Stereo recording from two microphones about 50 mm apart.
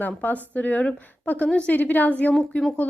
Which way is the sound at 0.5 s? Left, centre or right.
Left.